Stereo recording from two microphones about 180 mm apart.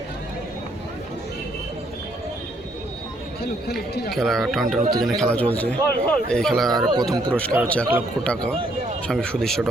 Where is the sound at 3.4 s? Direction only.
65° left (ahead or behind).